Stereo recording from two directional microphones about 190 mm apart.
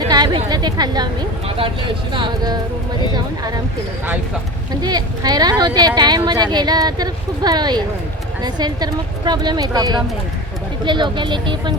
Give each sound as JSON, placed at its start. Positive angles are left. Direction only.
{"t": 0.1, "sound": "a woman's voice", "side_deg": -20}
{"t": 2.1, "sound": "speech", "side_deg": -25}
{"t": 4.8, "sound": "speech", "side_deg": -20}